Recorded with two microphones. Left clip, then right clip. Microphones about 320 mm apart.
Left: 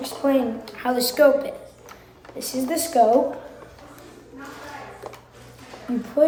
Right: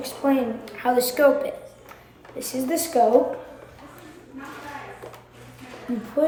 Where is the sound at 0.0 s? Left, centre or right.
Centre.